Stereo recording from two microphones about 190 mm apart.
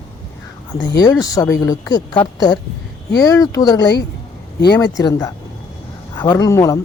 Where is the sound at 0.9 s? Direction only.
20° left (ahead or behind).